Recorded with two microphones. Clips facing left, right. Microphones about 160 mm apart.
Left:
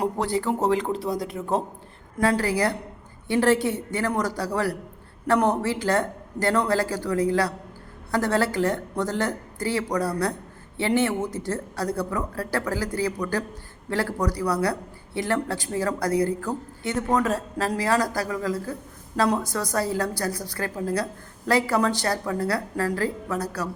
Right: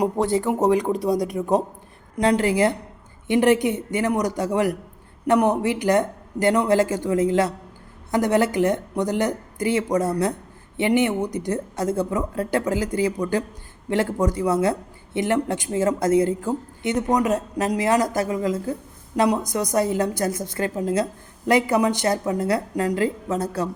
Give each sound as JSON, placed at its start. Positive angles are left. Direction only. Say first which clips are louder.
{"t": 0.0, "sound": "speech", "louder": "right 4 dB", "side_deg": -20}